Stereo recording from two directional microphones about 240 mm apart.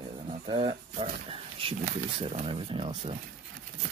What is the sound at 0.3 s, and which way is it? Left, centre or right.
Speech, right.